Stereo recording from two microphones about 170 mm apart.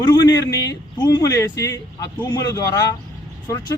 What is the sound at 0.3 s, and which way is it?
Speech, 20° left (ahead or behind).